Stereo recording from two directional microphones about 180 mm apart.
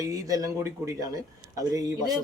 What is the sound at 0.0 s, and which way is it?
Speech, 20° right (ahead or behind).